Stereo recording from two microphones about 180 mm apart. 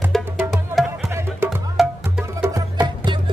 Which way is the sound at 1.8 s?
Centre (ahead or behind).